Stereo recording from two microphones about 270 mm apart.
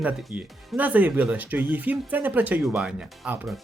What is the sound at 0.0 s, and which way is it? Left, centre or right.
Speech, centre.